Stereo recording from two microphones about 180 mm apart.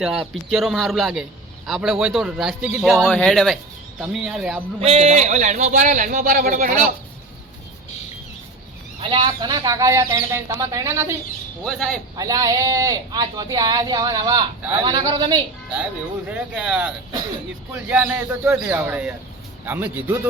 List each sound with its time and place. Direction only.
0.0 s speech: 5° right (ahead or behind)
4.8 s a man's voice: 35° right (ahead or behind)
9.0 s speech: 25° right (ahead or behind)
11.6 s speech: centre (ahead or behind)
12.1 s speech: 20° right (ahead or behind)
16.3 s speech: 5° right (ahead or behind)